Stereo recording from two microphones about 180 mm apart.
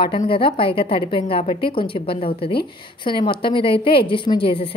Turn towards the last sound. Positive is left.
turn(degrees=25)  # may be behind; listen again after turning